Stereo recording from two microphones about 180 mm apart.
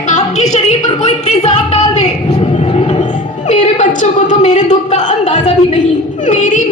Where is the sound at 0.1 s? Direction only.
40° left (ahead or behind).